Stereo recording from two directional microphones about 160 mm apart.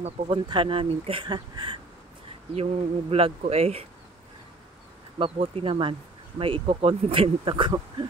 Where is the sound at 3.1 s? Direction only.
40° right (ahead or behind).